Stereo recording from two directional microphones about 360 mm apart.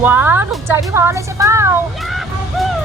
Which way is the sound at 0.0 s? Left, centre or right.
Centre.